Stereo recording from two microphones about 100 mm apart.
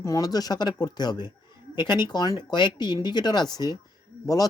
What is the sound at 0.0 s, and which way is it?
Speech, 35° left (ahead or behind).